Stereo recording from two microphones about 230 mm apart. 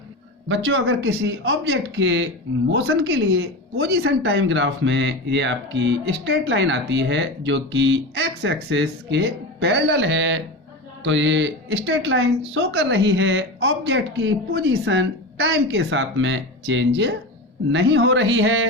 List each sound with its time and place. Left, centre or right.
0.4 s speech: right